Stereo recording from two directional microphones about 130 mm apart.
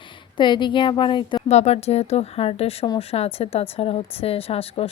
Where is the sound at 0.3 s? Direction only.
35° left (ahead or behind).